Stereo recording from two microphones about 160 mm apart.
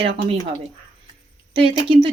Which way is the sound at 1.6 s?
35° right (ahead or behind).